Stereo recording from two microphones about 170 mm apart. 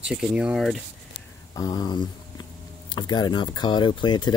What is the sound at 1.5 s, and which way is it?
Speech, 25° left (ahead or behind).